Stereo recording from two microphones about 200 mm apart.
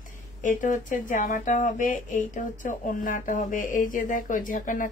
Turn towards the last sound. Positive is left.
turn(degrees=40)  # may be behind; listen again after turning